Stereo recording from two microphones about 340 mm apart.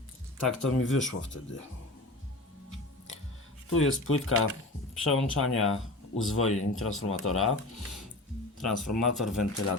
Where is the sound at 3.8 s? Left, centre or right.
Left.